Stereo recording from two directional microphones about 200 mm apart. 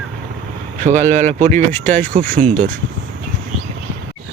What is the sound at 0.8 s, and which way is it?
Speech, 40° right (ahead or behind).